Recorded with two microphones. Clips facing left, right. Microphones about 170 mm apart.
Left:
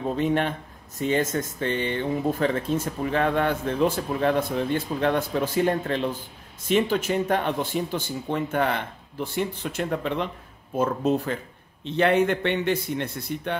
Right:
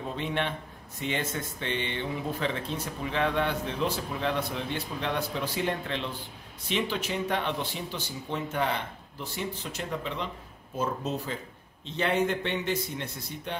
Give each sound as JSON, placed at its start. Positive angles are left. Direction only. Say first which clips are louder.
{"t": 0.1, "sound": "speech", "louder": "left 7 dB", "side_deg": 40}